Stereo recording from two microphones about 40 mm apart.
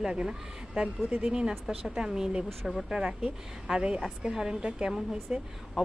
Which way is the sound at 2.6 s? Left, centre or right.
Centre.